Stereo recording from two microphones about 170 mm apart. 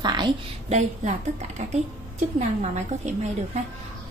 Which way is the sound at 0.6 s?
45° right (ahead or behind).